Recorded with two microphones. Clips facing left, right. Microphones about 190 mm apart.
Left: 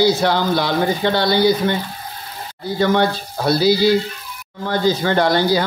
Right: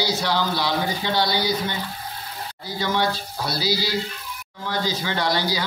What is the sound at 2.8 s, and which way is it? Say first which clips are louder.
Speech: left 7 dB; 55° left (ahead or behind).